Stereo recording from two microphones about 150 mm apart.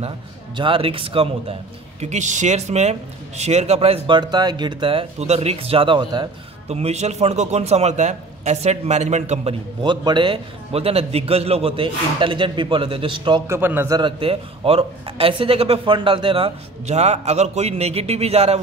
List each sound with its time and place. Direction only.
0.6 s a man's voice: 35° right (ahead or behind)
2.0 s speech: 50° right (ahead or behind)
4.2 s a man's voice: 30° right (ahead or behind)
6.7 s a man's voice: 45° right (ahead or behind)
13.5 s a man's voice: 15° right (ahead or behind)
13.9 s a man's voice: 35° right (ahead or behind)